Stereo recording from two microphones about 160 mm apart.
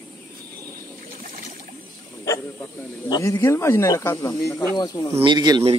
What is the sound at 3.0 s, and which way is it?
Speech, 25° left (ahead or behind).